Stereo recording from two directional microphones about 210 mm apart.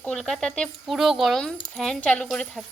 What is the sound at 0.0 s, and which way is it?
Speech, 5° left (ahead or behind).